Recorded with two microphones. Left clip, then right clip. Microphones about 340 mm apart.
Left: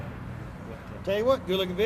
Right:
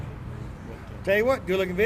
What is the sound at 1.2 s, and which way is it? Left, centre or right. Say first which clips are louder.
Speech: right 1 dB; right.